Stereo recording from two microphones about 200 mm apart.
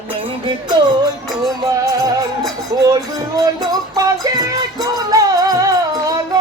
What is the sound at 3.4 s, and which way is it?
Music, 15° right (ahead or behind).